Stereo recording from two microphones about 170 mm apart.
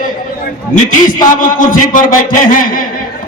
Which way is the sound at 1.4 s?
50° left (ahead or behind).